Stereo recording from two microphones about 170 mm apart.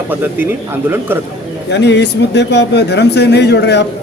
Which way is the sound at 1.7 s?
90° left.